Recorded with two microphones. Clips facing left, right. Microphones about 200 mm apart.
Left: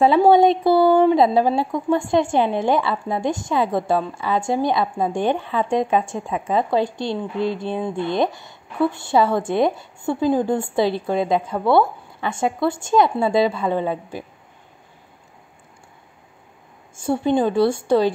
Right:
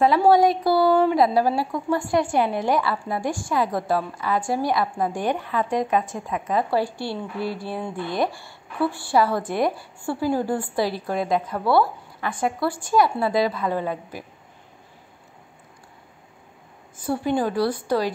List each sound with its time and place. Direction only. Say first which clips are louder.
0.2 s speech: left 3 dB; 25° left (ahead or behind)
16.9 s speech: left 4 dB; 25° left (ahead or behind)